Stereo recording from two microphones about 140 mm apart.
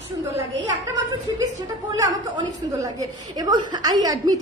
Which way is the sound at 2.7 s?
25° right (ahead or behind).